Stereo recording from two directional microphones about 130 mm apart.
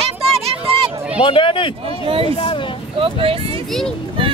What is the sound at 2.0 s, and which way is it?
Speech, 45° right (ahead or behind).